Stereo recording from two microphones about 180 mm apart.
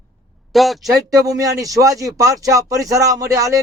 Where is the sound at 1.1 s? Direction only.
20° right (ahead or behind).